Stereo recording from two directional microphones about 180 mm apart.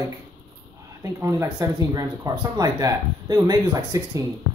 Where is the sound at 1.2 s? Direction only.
15° right (ahead or behind).